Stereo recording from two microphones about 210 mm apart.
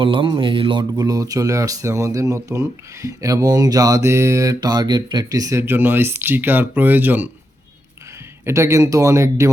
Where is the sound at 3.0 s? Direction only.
15° right (ahead or behind).